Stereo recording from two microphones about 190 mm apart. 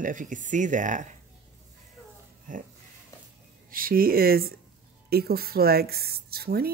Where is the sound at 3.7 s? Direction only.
50° right (ahead or behind).